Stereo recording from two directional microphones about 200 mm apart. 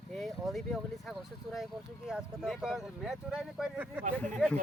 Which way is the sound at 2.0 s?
5° right (ahead or behind).